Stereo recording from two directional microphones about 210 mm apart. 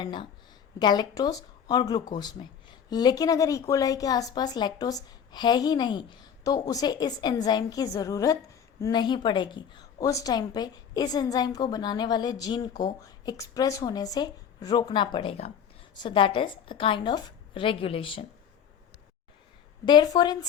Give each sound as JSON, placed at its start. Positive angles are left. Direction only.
{"t": 0.0, "sound": "speech", "side_deg": 20}
{"t": 19.8, "sound": "speech", "side_deg": 20}